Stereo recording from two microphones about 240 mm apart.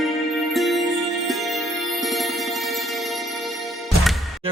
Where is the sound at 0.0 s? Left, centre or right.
Centre.